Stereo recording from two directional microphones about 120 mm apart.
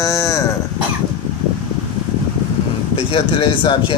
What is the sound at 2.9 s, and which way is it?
Speech, 50° left (ahead or behind).